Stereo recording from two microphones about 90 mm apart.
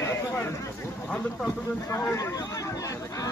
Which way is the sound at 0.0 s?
30° left (ahead or behind).